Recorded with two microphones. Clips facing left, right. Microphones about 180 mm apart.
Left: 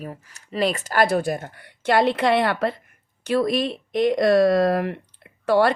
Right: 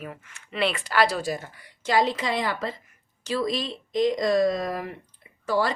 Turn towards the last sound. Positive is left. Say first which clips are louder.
# left 7 dB
turn(degrees=65)  # may be behind; listen again after turning